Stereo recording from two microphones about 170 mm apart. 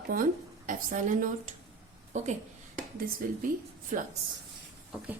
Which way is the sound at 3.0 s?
55° right (ahead or behind).